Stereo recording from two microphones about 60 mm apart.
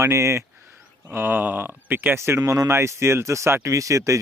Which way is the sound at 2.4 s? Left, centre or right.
Right.